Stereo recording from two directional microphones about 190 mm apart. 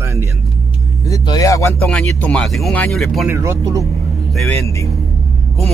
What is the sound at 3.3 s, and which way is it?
Speech, 15° right (ahead or behind).